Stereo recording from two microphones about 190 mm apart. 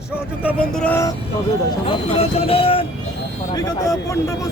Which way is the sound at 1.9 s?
30° left (ahead or behind).